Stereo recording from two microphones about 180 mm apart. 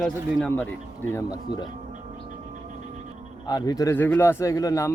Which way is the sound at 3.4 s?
20° left (ahead or behind).